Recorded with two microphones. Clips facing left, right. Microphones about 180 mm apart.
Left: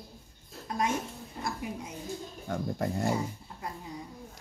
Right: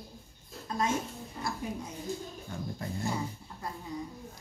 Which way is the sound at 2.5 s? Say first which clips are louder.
Left 8 dB; 80° left.